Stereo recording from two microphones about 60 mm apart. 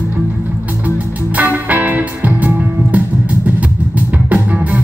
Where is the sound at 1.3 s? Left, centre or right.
Right.